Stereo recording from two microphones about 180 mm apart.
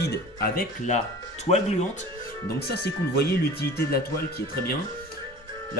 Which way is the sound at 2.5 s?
65° left (ahead or behind).